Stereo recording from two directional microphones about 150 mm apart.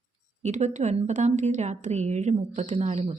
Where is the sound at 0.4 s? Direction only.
50° right (ahead or behind).